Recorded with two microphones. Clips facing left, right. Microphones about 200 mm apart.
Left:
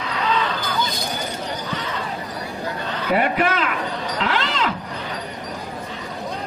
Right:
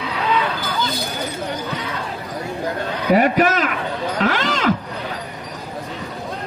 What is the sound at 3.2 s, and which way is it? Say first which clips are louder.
Speech: right 4 dB; 40° right (ahead or behind).